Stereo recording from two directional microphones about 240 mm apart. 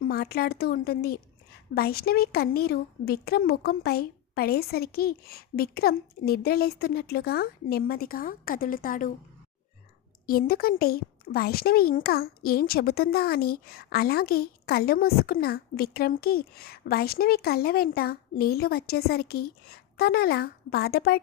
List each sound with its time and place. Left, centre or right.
0.0 s speech: left
10.2 s speech: left